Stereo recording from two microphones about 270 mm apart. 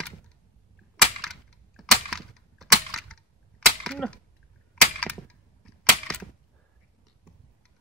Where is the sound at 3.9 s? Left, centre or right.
Centre.